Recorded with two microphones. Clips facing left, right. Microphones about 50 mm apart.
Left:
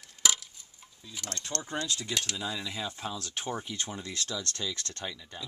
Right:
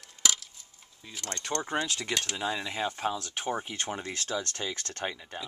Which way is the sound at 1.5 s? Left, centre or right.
Centre.